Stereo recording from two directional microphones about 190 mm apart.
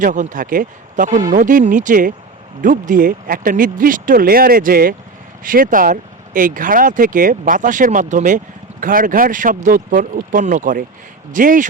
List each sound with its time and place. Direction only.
0.0 s speech: 40° right (ahead or behind)